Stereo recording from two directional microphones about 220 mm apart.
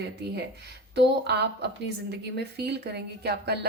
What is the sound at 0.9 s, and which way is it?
A woman's voice, 50° right (ahead or behind).